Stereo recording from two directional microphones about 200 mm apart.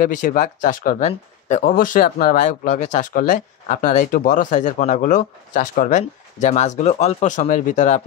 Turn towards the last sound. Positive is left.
turn(degrees=35)  # may be behind; listen again after turning